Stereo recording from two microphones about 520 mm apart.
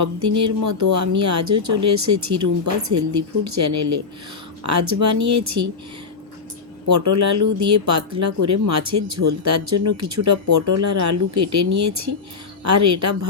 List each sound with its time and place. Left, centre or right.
0.0 s speech: right
6.8 s speech: right